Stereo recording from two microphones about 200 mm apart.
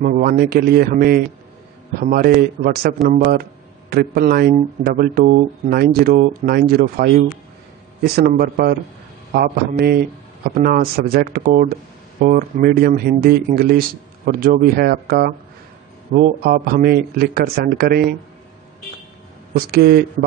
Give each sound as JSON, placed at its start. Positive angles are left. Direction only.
{"t": 0.0, "sound": "speech", "side_deg": -50}
{"t": 19.5, "sound": "speech", "side_deg": -50}